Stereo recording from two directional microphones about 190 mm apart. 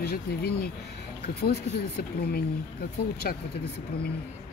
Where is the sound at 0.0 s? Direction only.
55° left (ahead or behind).